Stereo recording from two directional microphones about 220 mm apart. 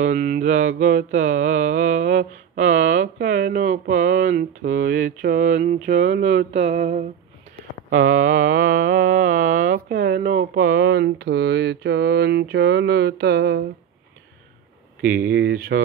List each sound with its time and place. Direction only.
0.1 s mantra: 35° right (ahead or behind)
0.5 s mantra: 55° right (ahead or behind)
2.9 s speech: 50° right (ahead or behind)
3.7 s mantra: 55° right (ahead or behind)
4.2 s mantra: 35° right (ahead or behind)
5.9 s speech: 55° right (ahead or behind)
6.5 s mantra: 30° right (ahead or behind)
10.0 s speech: 35° right (ahead or behind)
15.0 s speech: 10° right (ahead or behind)
15.3 s speech: 45° right (ahead or behind)